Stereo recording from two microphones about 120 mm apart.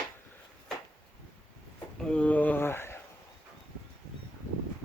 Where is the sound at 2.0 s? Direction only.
10° left (ahead or behind).